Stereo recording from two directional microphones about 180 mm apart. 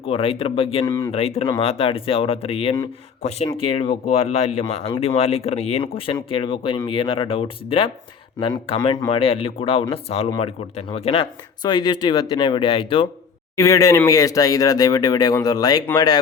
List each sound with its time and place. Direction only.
0.0 s speech: 30° left (ahead or behind)
0.9 s speech: 15° left (ahead or behind)
1.1 s speech: 35° left (ahead or behind)
13.6 s speech: 15° left (ahead or behind)